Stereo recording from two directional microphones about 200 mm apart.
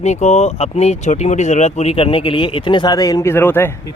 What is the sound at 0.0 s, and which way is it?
Speech, 35° left (ahead or behind).